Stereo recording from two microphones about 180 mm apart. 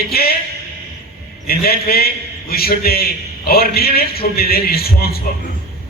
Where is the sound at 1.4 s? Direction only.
55° left (ahead or behind).